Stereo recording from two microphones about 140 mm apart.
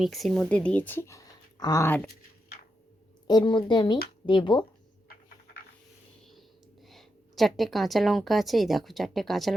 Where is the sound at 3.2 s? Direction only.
30° left (ahead or behind).